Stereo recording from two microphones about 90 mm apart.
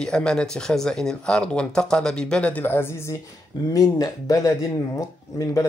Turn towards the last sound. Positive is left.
turn(degrees=40)  # may be behind; listen again after turning